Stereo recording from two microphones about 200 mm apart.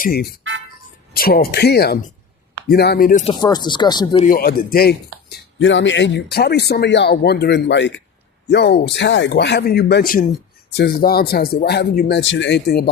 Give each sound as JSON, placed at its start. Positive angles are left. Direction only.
{"t": 0.0, "sound": "speech", "side_deg": 50}
{"t": 3.2, "sound": "speech", "side_deg": 20}
{"t": 4.2, "sound": "speech", "side_deg": 45}
{"t": 5.5, "sound": "speech", "side_deg": 70}